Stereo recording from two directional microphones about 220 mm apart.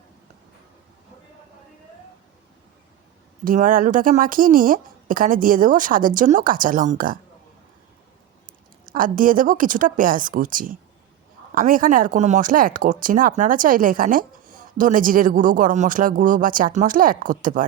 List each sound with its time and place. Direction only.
3.4 s speech: 35° right (ahead or behind)
8.9 s speech: 40° right (ahead or behind)